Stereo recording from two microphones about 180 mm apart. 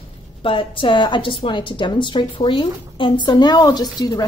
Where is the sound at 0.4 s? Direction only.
30° left (ahead or behind).